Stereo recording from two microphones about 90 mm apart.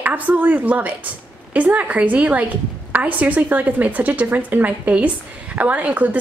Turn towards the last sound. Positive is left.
turn(degrees=-15)  # may be behind; listen again after turning